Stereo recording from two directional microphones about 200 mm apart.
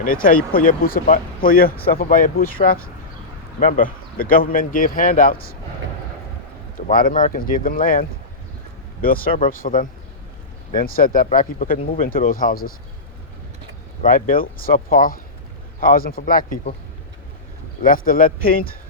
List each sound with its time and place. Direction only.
0.0 s speech: 45° left (ahead or behind)
6.8 s speech: 40° left (ahead or behind)
14.0 s speech: 45° left (ahead or behind)
17.8 s speech: 45° left (ahead or behind)